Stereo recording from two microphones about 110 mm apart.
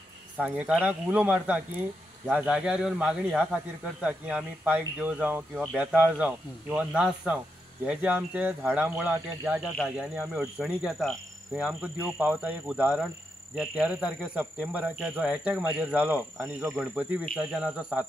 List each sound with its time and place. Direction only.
0.4 s speech: 10° right (ahead or behind)
9.6 s speech: 5° right (ahead or behind)
17.2 s speech: 5° left (ahead or behind)
17.6 s speech: 10° right (ahead or behind)